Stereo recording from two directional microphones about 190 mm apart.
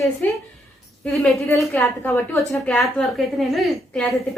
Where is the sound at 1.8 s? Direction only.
15° left (ahead or behind).